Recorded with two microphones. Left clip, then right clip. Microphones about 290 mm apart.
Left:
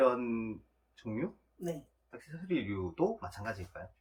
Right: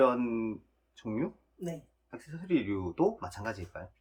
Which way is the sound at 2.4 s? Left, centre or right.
Right.